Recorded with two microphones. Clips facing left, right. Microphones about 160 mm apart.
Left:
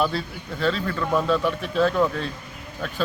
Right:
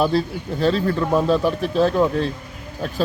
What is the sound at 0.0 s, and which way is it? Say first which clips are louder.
Speech: right 5 dB; 35° right (ahead or behind).